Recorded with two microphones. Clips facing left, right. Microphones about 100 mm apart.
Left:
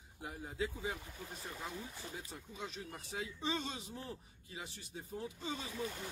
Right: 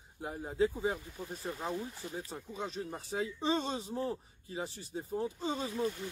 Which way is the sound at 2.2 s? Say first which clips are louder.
Right 9 dB; 35° right (ahead or behind).